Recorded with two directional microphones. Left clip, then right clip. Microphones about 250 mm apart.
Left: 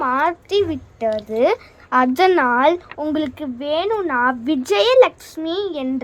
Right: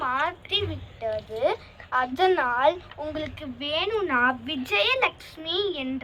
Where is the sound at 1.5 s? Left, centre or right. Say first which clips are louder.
Left 7 dB; left.